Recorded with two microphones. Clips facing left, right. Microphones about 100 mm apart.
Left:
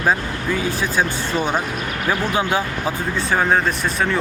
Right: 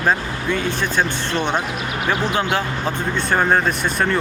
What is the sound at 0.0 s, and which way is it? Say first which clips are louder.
Speech: even; 5° left (ahead or behind).